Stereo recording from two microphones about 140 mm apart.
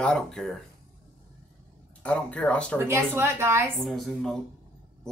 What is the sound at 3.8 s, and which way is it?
Speech, centre (ahead or behind).